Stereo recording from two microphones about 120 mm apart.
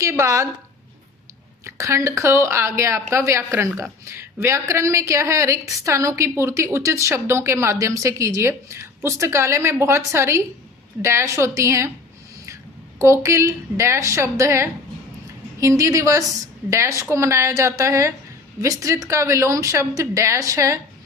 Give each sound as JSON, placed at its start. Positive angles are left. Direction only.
{"t": 0.0, "sound": "a woman's voice", "side_deg": -25}
{"t": 1.6, "sound": "a woman's voice", "side_deg": -25}
{"t": 13.0, "sound": "a woman's voice", "side_deg": -25}